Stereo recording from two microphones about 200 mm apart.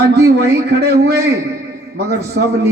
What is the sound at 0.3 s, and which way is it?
A man's voice, 55° right (ahead or behind).